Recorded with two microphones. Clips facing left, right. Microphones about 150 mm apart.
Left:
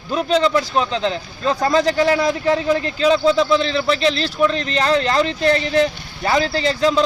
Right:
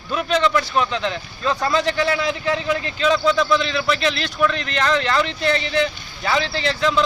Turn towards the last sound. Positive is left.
turn(degrees=35)  # may be behind; listen again after turning